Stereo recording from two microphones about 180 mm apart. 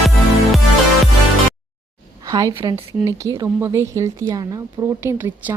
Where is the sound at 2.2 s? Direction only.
20° right (ahead or behind).